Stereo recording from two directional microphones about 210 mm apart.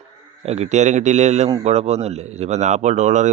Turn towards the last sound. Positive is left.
turn(degrees=-35)  # may be behind; listen again after turning